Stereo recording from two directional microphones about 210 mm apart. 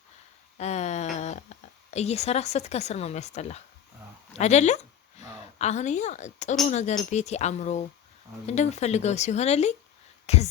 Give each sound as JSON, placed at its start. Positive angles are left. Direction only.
{"t": 0.6, "sound": "a woman's voice", "side_deg": 30}